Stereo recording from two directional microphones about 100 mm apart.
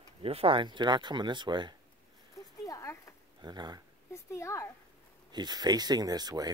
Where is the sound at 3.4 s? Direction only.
45° right (ahead or behind).